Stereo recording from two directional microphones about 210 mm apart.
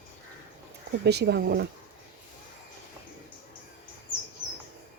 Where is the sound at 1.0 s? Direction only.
50° right (ahead or behind).